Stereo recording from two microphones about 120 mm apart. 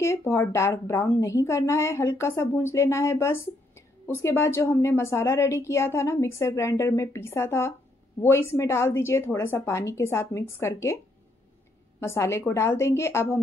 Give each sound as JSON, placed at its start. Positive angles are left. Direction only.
{"t": 0.0, "sound": "a woman's voice", "side_deg": 20}
{"t": 12.0, "sound": "a woman's voice", "side_deg": 20}